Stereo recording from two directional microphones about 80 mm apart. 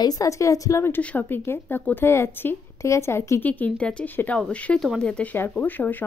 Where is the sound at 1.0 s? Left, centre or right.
Centre; by 3.4 s left.